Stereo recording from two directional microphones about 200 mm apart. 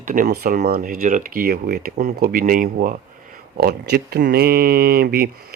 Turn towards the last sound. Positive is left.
turn(degrees=-50)  # may be behind; listen again after turning